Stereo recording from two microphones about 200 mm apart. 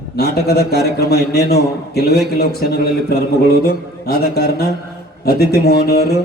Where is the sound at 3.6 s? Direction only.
50° left (ahead or behind).